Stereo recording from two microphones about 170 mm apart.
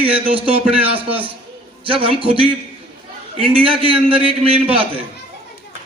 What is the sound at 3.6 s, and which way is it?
Speech, 30° right (ahead or behind).